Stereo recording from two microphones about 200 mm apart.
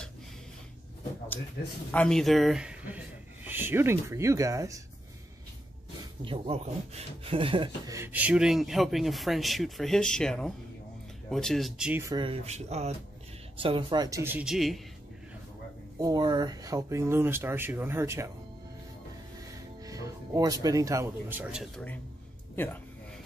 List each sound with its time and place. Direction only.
1.9 s speech: 5° left (ahead or behind); by 4.8 s 15° right (ahead or behind)
6.2 s speech: 25° right (ahead or behind); by 14.8 s centre (ahead or behind)
16.0 s speech: 20° right (ahead or behind)
19.8 s speech: 15° right (ahead or behind)